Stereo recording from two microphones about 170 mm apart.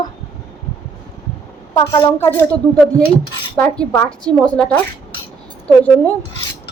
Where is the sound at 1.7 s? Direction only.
30° left (ahead or behind).